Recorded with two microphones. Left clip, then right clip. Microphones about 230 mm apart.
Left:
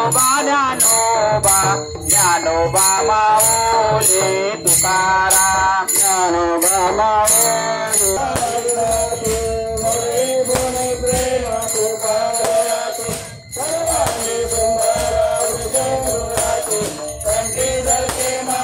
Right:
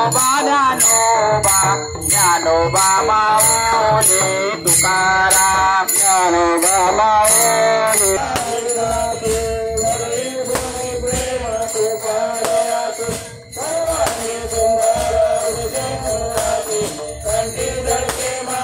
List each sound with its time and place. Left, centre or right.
0.0 s music: right